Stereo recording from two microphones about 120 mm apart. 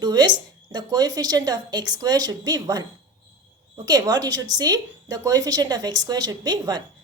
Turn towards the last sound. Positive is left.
turn(degrees=-35)  # may be behind; listen again after turning